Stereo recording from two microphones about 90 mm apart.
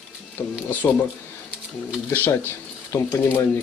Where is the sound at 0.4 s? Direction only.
25° left (ahead or behind).